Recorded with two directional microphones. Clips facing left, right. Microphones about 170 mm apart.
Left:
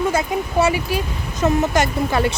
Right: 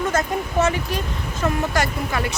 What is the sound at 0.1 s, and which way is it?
Speech, 10° left (ahead or behind).